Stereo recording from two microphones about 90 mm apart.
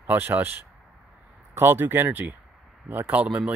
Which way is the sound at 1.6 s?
25° right (ahead or behind).